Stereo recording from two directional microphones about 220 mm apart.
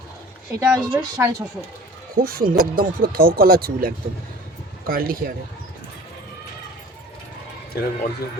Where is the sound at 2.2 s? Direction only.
40° right (ahead or behind).